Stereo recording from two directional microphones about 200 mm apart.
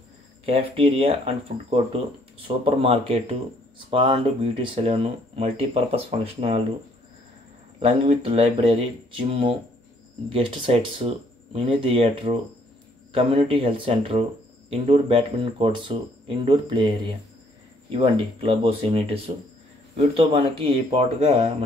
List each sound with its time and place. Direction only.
0.5 s speech: 30° right (ahead or behind)
7.8 s speech: 25° right (ahead or behind)